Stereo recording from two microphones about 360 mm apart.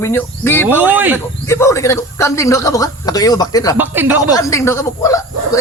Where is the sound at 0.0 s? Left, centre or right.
Centre.